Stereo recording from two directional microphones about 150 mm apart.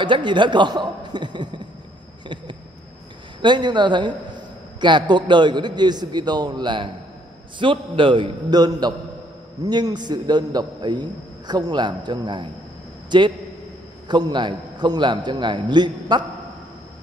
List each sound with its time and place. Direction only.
0.0 s a man's voice: 30° right (ahead or behind)
2.2 s a sound: 30° right (ahead or behind)
3.4 s a man's voice: 30° right (ahead or behind)